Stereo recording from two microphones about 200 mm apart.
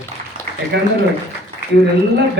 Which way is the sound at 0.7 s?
60° right (ahead or behind).